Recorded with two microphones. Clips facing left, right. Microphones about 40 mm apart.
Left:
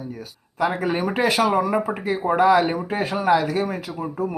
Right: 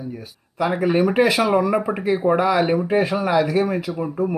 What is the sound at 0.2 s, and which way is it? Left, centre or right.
Speech, right.